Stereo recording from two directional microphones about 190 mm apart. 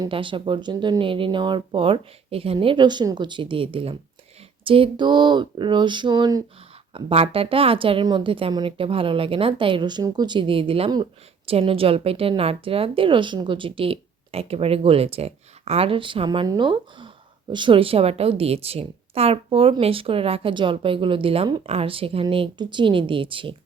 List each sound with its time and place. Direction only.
0.0 s a woman's voice: 25° right (ahead or behind)